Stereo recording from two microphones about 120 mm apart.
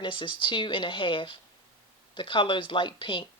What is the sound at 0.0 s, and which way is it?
Speech, 40° left (ahead or behind).